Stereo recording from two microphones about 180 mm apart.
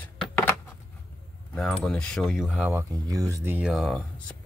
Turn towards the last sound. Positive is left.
turn(degrees=0)  # may be behind; listen again after turning